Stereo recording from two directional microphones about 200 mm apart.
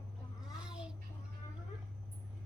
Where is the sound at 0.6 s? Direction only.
5° right (ahead or behind).